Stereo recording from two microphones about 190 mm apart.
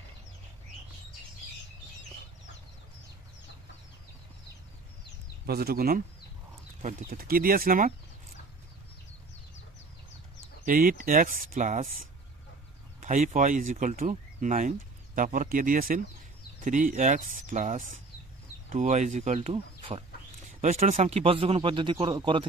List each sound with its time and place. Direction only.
5.5 s speech: 55° right (ahead or behind)
10.6 s speech: 45° right (ahead or behind)
13.0 s speech: 40° right (ahead or behind)
20.4 s speech: 40° right (ahead or behind)